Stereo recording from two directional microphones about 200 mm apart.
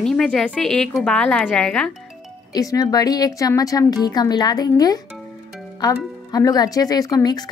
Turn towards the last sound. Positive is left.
turn(degrees=20)  # may be behind; listen again after turning